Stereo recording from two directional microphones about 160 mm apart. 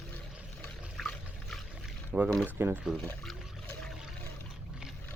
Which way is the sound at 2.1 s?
5° right (ahead or behind).